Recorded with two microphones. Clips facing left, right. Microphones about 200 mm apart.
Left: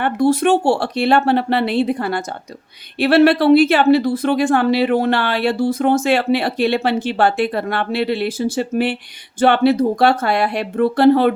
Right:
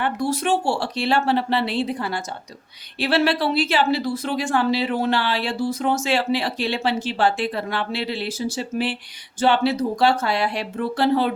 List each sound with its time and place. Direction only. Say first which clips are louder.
0.0 s speech: left 8 dB; 55° left (ahead or behind)